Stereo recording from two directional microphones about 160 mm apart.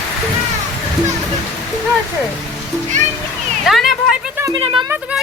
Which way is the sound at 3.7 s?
Centre (ahead or behind).